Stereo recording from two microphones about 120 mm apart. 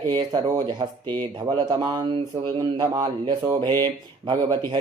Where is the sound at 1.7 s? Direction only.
35° right (ahead or behind).